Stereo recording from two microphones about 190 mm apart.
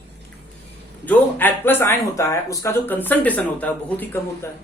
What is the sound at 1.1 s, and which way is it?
Speech, 10° left (ahead or behind).